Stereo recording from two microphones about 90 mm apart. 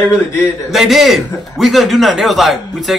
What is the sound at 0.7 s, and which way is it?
A man's voice, centre (ahead or behind).